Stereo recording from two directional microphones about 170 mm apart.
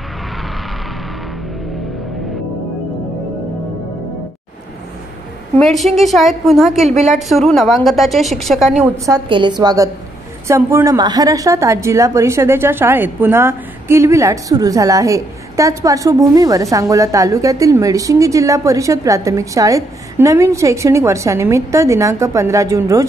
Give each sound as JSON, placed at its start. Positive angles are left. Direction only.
{"t": 5.6, "sound": "a woman's voice", "side_deg": 0}
{"t": 8.9, "sound": "a woman's voice", "side_deg": -20}